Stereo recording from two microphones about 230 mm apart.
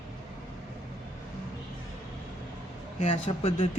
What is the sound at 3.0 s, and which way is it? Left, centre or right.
Speech, left.